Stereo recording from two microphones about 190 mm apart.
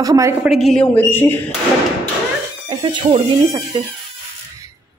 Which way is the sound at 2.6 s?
25° right (ahead or behind).